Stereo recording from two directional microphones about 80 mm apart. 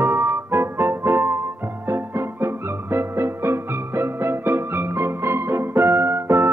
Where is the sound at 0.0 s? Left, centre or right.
Right.